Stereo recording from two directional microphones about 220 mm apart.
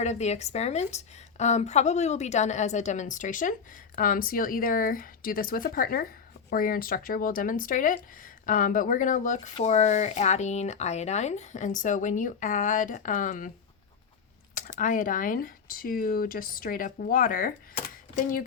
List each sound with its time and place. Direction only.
0.0 s speech: 30° left (ahead or behind)
14.5 s speech: 35° left (ahead or behind)